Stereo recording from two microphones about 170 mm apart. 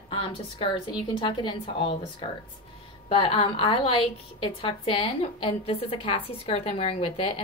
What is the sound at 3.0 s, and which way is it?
A woman's voice, 30° left (ahead or behind).